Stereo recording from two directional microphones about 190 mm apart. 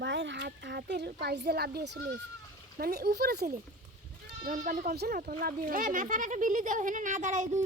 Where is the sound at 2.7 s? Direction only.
55° right (ahead or behind).